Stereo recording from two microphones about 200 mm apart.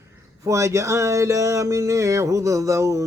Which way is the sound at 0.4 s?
15° right (ahead or behind).